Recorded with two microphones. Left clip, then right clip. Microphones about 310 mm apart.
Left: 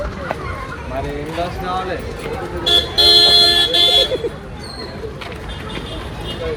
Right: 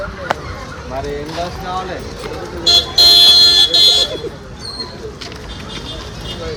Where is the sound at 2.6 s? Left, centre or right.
Centre.